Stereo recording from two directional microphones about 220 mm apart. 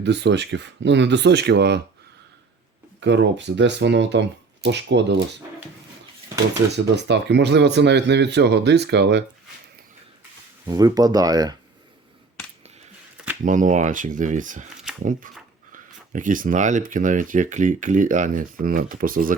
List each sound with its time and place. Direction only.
0.0 s speech: 50° right (ahead or behind)
3.0 s speech: 55° right (ahead or behind)
6.7 s speech: 50° right (ahead or behind)
10.7 s speech: 15° right (ahead or behind)
13.4 s speech: 35° right (ahead or behind)
14.9 s a sound: centre (ahead or behind)
15.7 s speech: 35° right (ahead or behind)